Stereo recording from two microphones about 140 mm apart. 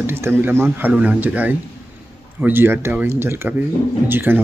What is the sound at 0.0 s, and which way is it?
Speech, 15° right (ahead or behind).